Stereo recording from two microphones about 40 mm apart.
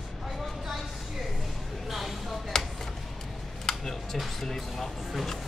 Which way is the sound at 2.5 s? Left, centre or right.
Centre.